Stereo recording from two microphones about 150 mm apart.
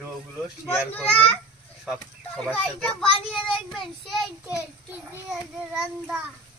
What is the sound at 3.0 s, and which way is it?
Speech, 35° left (ahead or behind).